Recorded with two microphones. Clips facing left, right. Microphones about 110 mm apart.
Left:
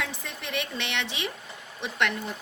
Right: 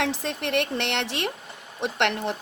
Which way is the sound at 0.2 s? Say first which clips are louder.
Right 8 dB; 65° right (ahead or behind).